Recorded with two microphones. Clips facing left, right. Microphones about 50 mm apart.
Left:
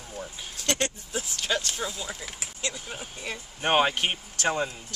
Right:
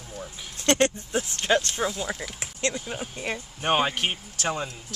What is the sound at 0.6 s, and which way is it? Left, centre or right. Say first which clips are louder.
Speech: right 7 dB; right.